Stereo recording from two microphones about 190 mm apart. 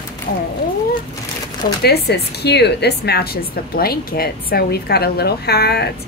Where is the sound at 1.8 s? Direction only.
60° left (ahead or behind).